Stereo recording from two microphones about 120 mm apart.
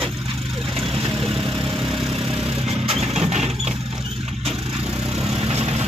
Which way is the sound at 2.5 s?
55° right (ahead or behind).